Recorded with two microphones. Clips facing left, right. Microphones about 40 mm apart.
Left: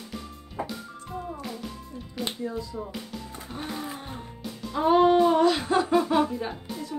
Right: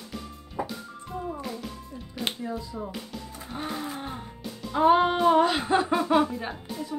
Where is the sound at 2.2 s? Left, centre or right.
Centre.